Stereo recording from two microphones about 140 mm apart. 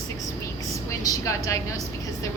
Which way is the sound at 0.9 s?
20° left (ahead or behind).